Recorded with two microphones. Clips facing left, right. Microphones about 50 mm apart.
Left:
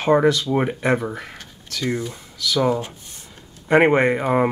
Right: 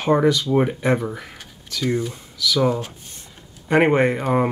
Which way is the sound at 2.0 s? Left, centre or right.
Centre.